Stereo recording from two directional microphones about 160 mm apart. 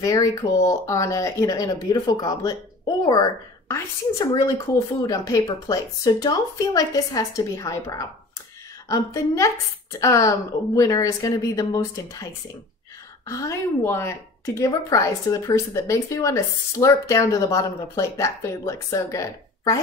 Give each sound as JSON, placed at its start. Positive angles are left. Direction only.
{"t": 0.0, "sound": "a woman's voice", "side_deg": 20}
{"t": 13.3, "sound": "a woman's voice", "side_deg": 20}